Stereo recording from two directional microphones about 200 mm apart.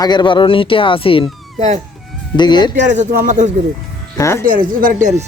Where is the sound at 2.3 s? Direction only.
20° left (ahead or behind).